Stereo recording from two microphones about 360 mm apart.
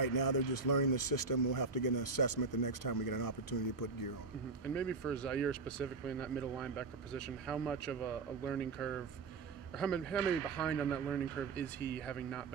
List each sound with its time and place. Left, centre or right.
0.0 s speech: left
4.7 s speech: centre